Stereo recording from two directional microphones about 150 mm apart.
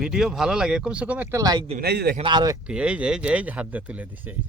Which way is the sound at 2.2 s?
30° right (ahead or behind).